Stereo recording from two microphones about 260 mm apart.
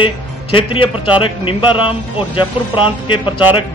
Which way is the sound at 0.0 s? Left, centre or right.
Centre.